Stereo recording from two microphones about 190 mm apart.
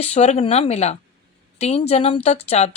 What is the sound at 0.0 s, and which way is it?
Speech, 35° left (ahead or behind).